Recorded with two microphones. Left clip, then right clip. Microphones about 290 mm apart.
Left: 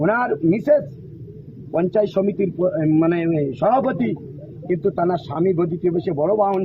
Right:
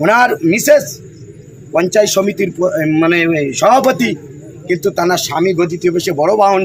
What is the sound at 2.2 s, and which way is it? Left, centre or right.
A man's voice, centre.